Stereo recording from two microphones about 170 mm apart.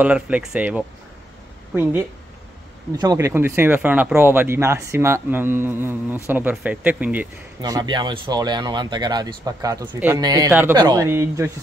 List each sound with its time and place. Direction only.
0.0 s speech: 10° right (ahead or behind)
7.6 s speech: 25° right (ahead or behind)